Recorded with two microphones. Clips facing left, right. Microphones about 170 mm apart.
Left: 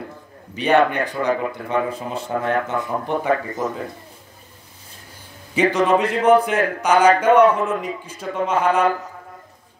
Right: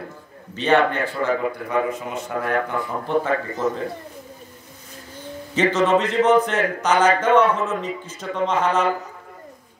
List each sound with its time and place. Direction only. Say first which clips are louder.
0.6 s a man's voice: left 1 dB; 15° left (ahead or behind)
1.7 s speech: left 2 dB; 30° left (ahead or behind)
5.5 s a man's voice: left 1 dB; 10° left (ahead or behind)